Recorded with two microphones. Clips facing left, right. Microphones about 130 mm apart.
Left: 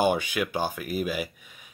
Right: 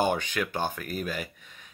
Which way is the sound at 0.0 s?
10° left (ahead or behind).